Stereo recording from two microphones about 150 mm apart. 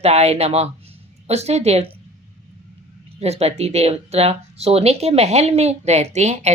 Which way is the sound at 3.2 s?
45° right (ahead or behind).